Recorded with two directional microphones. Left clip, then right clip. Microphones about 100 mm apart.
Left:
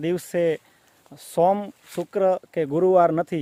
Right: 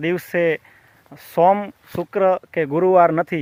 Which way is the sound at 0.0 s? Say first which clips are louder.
Right 3 dB; 20° left (ahead or behind).